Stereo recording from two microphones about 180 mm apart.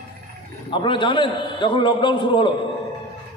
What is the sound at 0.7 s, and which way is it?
A man's voice, 25° left (ahead or behind).